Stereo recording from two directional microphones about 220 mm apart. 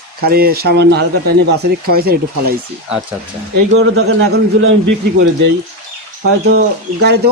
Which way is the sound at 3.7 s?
65° right (ahead or behind).